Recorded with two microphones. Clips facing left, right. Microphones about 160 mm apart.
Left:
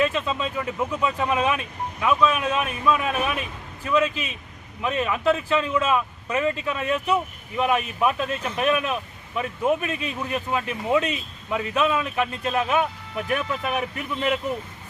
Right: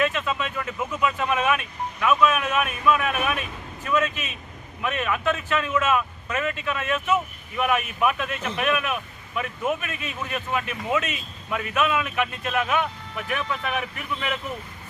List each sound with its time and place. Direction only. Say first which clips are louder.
0.0 s speech: left 1 dB; 30° left (ahead or behind)
4.8 s speech: left 2 dB; 30° left (ahead or behind)